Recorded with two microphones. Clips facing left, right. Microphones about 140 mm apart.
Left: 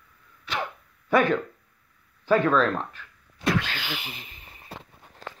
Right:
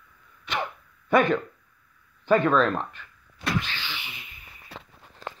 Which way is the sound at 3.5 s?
50° left (ahead or behind).